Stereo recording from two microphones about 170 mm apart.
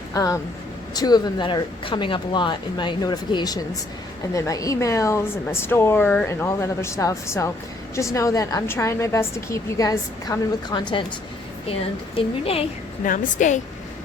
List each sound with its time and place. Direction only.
0.1 s a woman's voice: 20° left (ahead or behind)
12.1 s a woman's voice: 35° left (ahead or behind)
13.1 s a woman's voice: 50° left (ahead or behind)